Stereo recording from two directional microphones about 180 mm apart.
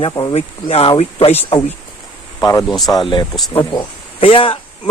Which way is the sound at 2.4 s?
20° left (ahead or behind).